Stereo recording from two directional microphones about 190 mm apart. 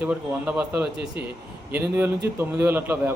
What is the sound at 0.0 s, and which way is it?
A man's voice, 5° right (ahead or behind).